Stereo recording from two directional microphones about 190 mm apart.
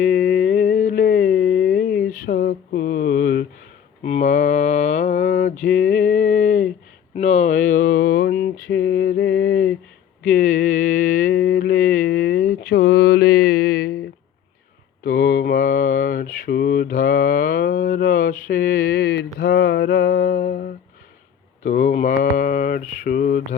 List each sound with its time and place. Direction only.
0.0 s mantra: 45° left (ahead or behind)
4.0 s mantra: 35° left (ahead or behind)
5.6 s a sound: 40° left (ahead or behind)
7.2 s mantra: 35° left (ahead or behind); by 9.4 s 50° left (ahead or behind)
10.2 s a sound: 45° left (ahead or behind)
11.4 s mantra: 55° left (ahead or behind)
15.0 s mantra: 45° left (ahead or behind)